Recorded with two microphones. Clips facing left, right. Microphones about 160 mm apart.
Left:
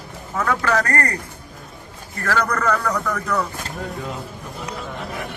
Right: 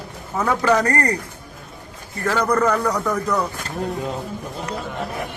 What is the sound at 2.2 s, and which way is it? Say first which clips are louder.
Speech: right 3 dB; 20° right (ahead or behind).